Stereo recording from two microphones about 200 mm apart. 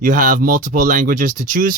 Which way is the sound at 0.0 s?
40° right (ahead or behind).